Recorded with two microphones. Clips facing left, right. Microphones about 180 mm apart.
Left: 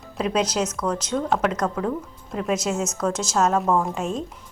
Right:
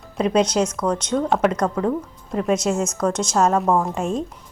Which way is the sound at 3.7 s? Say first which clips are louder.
Right 2 dB; 10° right (ahead or behind).